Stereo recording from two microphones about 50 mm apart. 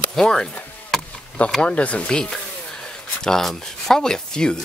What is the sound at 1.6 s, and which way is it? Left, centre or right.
Speech, left.